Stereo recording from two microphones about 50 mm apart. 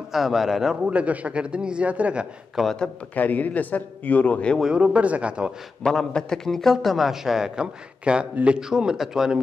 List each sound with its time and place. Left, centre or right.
0.1 s a man's voice: centre
0.8 s a man's voice: right
2.6 s a man's voice: centre
3.2 s a man's voice: left
4.7 s a man's voice: right
5.9 s a man's voice: centre